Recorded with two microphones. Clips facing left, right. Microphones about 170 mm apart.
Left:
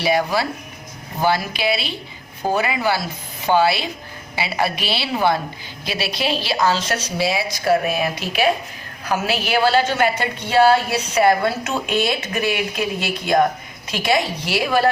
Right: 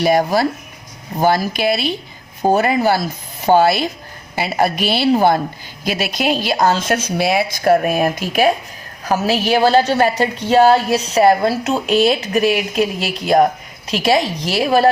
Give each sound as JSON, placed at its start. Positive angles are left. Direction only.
{"t": 0.0, "sound": "a woman's voice", "side_deg": -45}
{"t": 13.9, "sound": "a woman's voice", "side_deg": -35}